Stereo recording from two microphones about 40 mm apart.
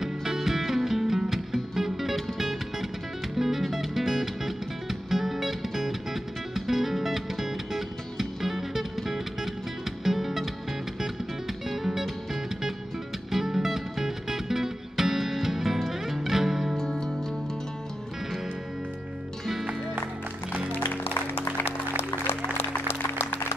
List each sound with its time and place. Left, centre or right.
0.0 s music: centre
11.7 s music: centre
13.3 s music: centre
16.7 s music: centre
20.7 s music: left